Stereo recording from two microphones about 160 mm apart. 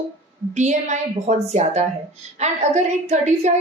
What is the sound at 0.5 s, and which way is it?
A woman's voice, 50° right (ahead or behind).